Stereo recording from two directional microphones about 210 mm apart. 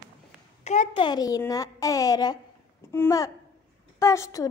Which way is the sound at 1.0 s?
20° left (ahead or behind).